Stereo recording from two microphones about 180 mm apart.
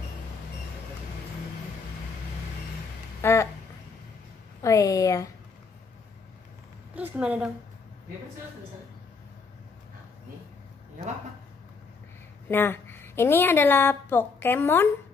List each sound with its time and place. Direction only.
3.2 s speech: 15° left (ahead or behind)
4.6 s a woman's voice: 20° left (ahead or behind)
7.0 s a woman's voice: 10° right (ahead or behind)
12.4 s a woman's voice: 10° left (ahead or behind)